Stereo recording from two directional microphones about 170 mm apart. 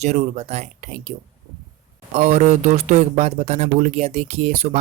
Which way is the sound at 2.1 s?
40° right (ahead or behind).